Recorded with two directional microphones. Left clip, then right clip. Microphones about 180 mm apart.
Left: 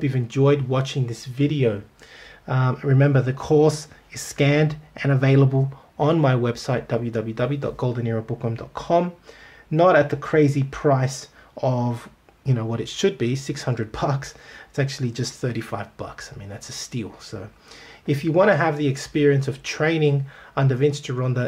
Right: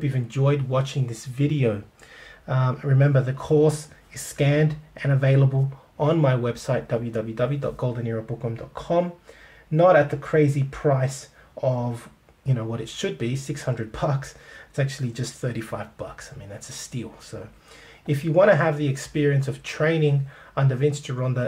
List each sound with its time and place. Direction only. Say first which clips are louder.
0.0 s speech: left 5 dB; 30° left (ahead or behind); by 1.8 s 10° left (ahead or behind)
2.4 s speech: left 3 dB; 25° left (ahead or behind)